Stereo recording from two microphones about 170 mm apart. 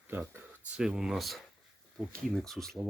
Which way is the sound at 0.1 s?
10° right (ahead or behind).